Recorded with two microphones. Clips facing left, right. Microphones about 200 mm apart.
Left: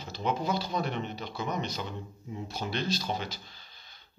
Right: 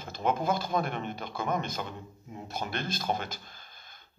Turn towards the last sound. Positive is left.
turn(degrees=-50)  # may be behind; listen again after turning